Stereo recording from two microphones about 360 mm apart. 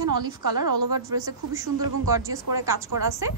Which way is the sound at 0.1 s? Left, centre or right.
Right.